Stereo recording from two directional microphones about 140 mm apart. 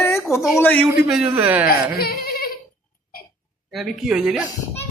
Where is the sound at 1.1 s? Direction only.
10° right (ahead or behind).